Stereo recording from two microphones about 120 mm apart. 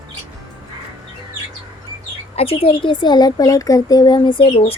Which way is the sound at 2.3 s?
55° left (ahead or behind).